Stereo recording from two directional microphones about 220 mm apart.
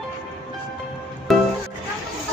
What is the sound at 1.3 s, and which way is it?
Music, centre (ahead or behind).